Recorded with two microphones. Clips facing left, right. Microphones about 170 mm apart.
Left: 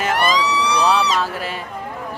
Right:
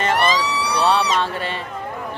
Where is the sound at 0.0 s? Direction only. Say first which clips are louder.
Even; centre (ahead or behind).